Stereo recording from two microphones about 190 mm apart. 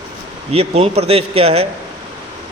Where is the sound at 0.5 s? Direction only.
30° right (ahead or behind).